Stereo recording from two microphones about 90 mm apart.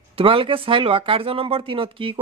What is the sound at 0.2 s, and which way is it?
Speech, 80° right.